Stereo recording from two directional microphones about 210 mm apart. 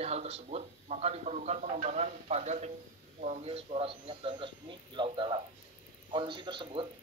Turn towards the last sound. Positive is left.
turn(degrees=-25)  # may be behind; listen again after turning